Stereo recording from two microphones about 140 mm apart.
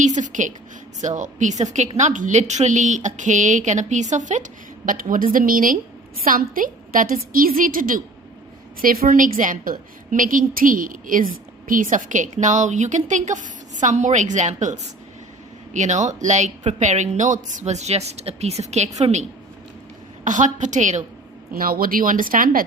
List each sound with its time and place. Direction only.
0.2 s a sound: 65° right (ahead or behind)
1.0 s speech: 60° right (ahead or behind)
4.9 s a woman's voice: 80° right
8.8 s a woman's voice: 90° right; by 19.2 s 55° right (ahead or behind)
20.2 s speech: 65° right (ahead or behind)
21.5 s a woman's voice: 90° right